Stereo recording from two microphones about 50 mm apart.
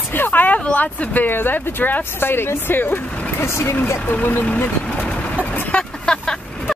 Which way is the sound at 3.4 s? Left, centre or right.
Left.